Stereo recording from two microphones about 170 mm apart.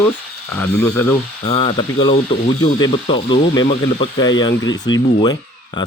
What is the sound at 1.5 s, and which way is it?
Speech, 30° left (ahead or behind).